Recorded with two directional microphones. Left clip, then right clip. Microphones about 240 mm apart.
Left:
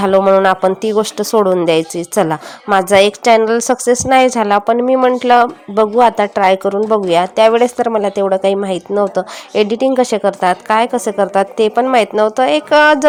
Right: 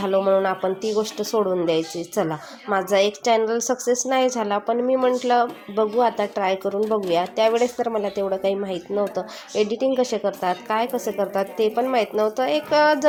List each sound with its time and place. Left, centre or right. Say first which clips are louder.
0.0 s speech: left 9 dB; left